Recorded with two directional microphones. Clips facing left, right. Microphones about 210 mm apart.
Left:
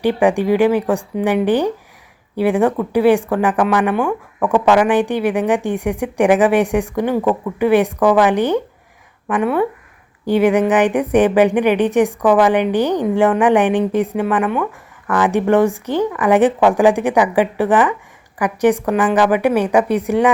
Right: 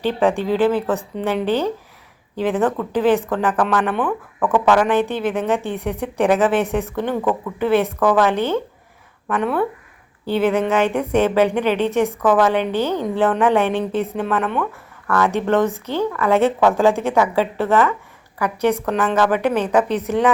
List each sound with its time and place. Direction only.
0.0 s speech: 15° left (ahead or behind)